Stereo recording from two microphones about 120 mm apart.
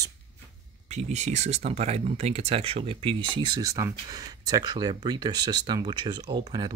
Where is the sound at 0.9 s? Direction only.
70° right (ahead or behind).